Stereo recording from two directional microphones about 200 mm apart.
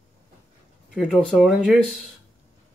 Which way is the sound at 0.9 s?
Centre (ahead or behind).